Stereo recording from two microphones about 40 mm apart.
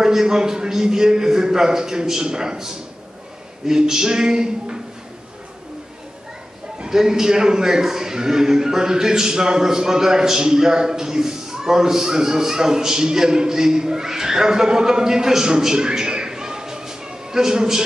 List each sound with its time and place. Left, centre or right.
0.0 s a man's voice: centre
6.9 s a man's voice: centre